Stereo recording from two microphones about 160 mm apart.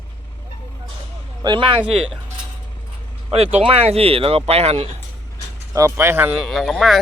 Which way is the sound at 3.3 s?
40° right (ahead or behind).